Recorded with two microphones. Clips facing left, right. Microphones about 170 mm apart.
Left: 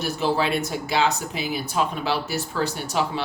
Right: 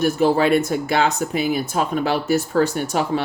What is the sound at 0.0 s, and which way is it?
Speech, 50° right (ahead or behind).